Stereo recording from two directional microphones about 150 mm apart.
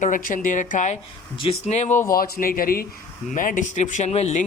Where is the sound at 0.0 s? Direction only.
65° left (ahead or behind).